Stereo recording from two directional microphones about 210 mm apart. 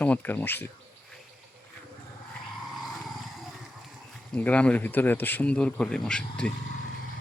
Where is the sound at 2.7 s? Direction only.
Centre (ahead or behind).